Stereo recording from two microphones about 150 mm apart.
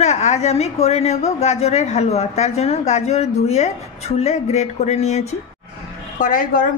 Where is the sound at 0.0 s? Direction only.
50° left (ahead or behind).